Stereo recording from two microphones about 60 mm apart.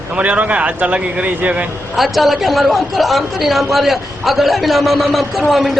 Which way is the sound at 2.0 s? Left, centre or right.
Centre.